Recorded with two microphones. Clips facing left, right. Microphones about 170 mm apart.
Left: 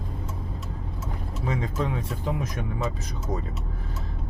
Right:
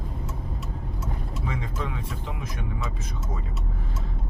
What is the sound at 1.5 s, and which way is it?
Speech, 40° left (ahead or behind).